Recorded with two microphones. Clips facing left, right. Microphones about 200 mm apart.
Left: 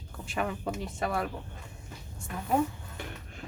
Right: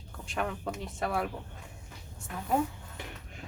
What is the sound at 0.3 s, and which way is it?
Speech, 5° left (ahead or behind).